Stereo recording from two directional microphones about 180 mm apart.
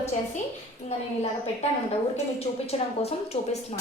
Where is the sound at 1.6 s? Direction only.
35° left (ahead or behind).